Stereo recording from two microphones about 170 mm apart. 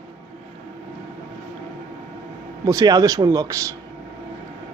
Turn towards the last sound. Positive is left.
turn(degrees=-20)  # may be behind; listen again after turning